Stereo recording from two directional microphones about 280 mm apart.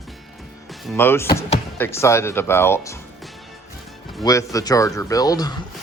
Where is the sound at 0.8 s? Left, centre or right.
Centre.